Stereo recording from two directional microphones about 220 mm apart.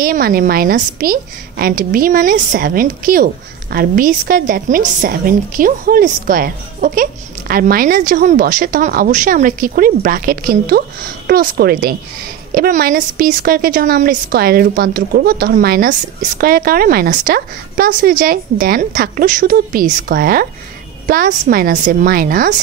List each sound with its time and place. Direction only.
0.0 s a woman's voice: 40° right (ahead or behind)